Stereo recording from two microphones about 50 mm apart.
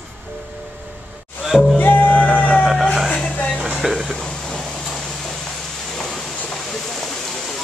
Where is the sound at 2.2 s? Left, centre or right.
Centre.